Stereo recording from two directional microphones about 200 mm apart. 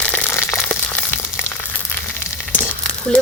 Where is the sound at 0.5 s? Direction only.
5° left (ahead or behind).